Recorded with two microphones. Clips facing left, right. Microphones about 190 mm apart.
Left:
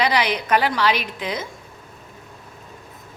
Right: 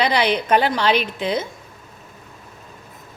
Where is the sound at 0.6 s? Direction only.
30° right (ahead or behind).